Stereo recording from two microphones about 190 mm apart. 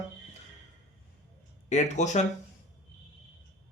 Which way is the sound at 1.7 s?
40° left (ahead or behind).